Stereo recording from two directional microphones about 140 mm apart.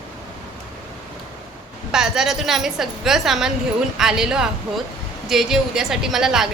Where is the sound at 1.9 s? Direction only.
5° right (ahead or behind).